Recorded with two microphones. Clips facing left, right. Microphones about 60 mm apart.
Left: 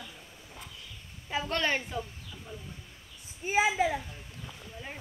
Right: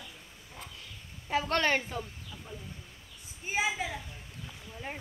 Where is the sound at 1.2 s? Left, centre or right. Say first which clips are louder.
Right 2 dB; right.